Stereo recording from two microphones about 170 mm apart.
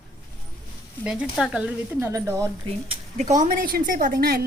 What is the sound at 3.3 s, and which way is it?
A woman's voice, 50° right (ahead or behind).